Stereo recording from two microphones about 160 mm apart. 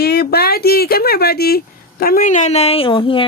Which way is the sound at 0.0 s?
80° left.